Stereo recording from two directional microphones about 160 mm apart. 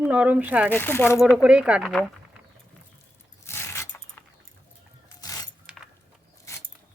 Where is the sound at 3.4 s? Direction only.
15° left (ahead or behind).